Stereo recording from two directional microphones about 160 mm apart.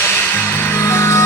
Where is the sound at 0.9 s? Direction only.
15° left (ahead or behind).